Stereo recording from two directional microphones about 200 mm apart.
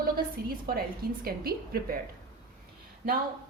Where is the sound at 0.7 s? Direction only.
50° right (ahead or behind).